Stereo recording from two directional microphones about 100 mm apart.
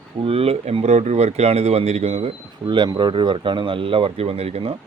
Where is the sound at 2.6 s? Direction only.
50° right (ahead or behind); by 4.8 s 80° right.